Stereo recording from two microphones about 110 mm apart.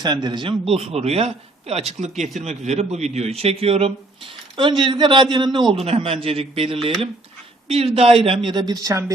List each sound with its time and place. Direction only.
0.0 s a man's voice: 40° right (ahead or behind); by 1.8 s 65° right (ahead or behind)
2.4 s a man's voice: 85° right; by 3.9 s 65° right (ahead or behind)
4.5 s speech: 45° right (ahead or behind)
5.8 s a man's voice: 60° right (ahead or behind); by 9.1 s 30° right (ahead or behind)